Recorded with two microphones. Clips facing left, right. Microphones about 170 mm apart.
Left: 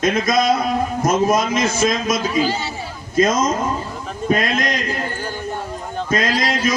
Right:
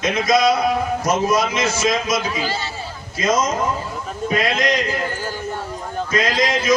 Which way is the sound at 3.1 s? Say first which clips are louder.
Left 4 dB; 50° left (ahead or behind).